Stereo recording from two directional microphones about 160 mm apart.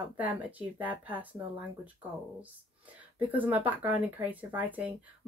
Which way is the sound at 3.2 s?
10° right (ahead or behind).